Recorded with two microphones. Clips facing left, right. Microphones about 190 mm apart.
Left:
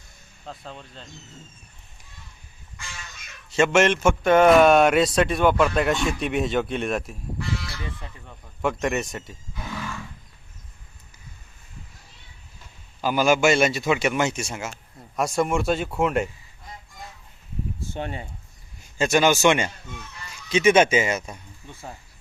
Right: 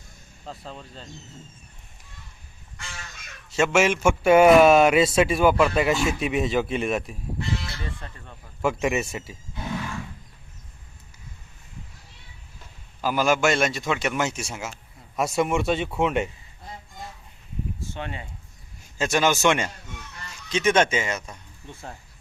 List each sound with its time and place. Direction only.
0.4 s a man's voice: centre (ahead or behind)
3.5 s a man's voice: 5° right (ahead or behind)
8.0 s speech: 15° left (ahead or behind)
8.6 s a man's voice: 5° right (ahead or behind)
13.0 s a man's voice: centre (ahead or behind)
17.9 s speech: 40° left (ahead or behind)
18.9 s a man's voice: centre (ahead or behind)